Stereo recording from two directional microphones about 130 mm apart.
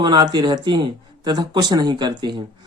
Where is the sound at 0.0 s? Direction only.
35° right (ahead or behind).